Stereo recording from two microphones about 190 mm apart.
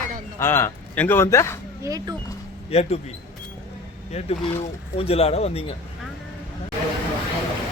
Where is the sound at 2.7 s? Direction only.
35° left (ahead or behind).